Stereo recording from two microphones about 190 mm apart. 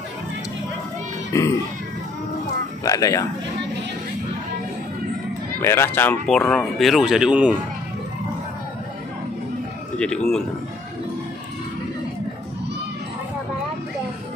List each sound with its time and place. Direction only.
1.3 s speech: 15° left (ahead or behind)
2.8 s speech: 15° left (ahead or behind)
5.6 s speech: 15° left (ahead or behind); by 7.6 s 5° right (ahead or behind)
9.9 s speech: 5° left (ahead or behind)